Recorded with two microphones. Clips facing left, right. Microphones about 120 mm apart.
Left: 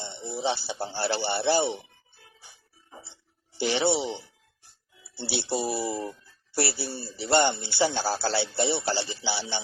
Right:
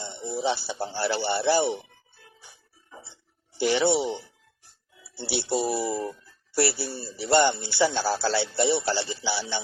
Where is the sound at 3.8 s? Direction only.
20° right (ahead or behind).